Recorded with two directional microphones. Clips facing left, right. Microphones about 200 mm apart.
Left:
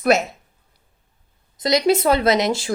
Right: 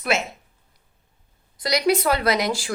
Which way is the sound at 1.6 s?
25° left (ahead or behind).